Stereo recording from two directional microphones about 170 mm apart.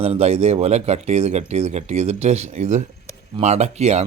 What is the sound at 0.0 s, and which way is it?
Speech, 35° right (ahead or behind).